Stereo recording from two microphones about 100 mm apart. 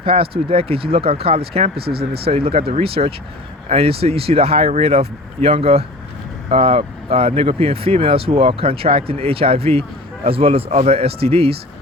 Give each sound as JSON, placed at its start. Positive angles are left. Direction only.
{"t": 0.0, "sound": "speech", "side_deg": -65}